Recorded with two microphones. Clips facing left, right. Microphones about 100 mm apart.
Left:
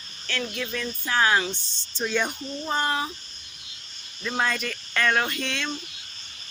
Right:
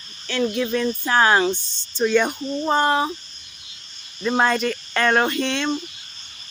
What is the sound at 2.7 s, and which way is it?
Speech, 35° right (ahead or behind).